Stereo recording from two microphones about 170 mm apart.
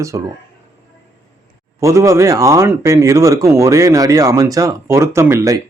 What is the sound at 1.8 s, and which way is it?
Speech, 15° right (ahead or behind).